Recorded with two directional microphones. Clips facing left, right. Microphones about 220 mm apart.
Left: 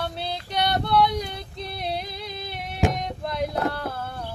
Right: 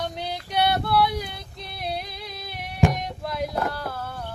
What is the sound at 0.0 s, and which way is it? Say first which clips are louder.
Female singing: even; 15° right (ahead or behind).